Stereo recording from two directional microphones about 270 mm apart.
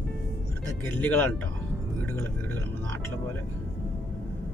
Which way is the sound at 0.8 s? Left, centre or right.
Centre.